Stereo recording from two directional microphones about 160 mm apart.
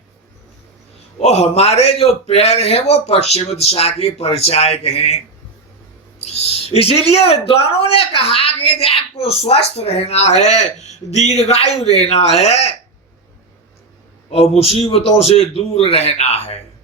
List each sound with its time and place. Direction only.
1.2 s a man's voice: 40° left (ahead or behind)
6.2 s a man's voice: 40° left (ahead or behind)
14.3 s a man's voice: 40° left (ahead or behind)